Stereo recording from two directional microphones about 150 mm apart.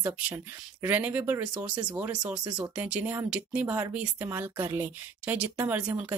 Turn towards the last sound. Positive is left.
turn(degrees=-10)  # may be behind; listen again after turning